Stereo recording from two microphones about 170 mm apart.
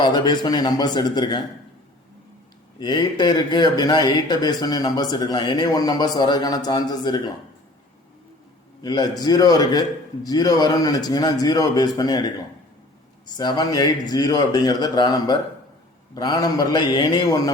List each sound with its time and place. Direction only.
0.0 s speech: 25° left (ahead or behind)
2.7 s speech: 25° left (ahead or behind)
8.8 s speech: 25° left (ahead or behind)
13.3 s speech: 20° left (ahead or behind)